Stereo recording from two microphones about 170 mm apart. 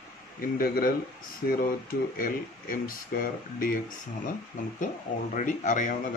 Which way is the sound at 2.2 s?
55° left (ahead or behind).